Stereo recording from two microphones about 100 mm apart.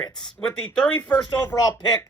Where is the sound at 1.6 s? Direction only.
45° left (ahead or behind).